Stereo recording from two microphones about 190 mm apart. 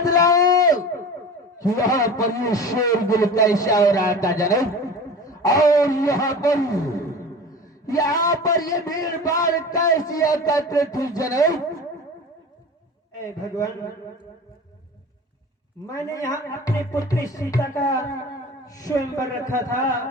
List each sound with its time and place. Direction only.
0.0 s a sound: 20° left (ahead or behind)
1.5 s a man's voice: 15° left (ahead or behind)
13.1 s a man's voice: 20° left (ahead or behind)
15.9 s a man's voice: 15° left (ahead or behind)